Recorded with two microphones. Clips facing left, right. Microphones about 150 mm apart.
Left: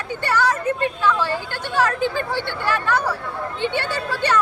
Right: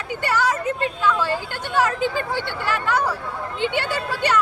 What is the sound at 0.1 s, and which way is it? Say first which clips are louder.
Speech: left 1 dB; 15° right (ahead or behind).